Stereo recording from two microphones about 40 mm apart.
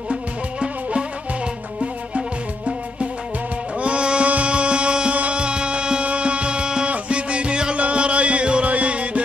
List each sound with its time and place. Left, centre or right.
0.1 s music: right